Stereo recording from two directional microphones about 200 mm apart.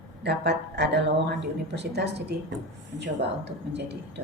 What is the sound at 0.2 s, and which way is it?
Speech, 55° right (ahead or behind).